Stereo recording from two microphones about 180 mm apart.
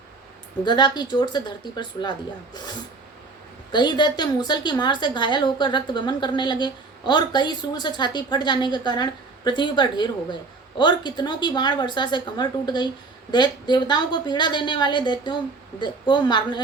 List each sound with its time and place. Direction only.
0.6 s a woman's voice: 25° left (ahead or behind)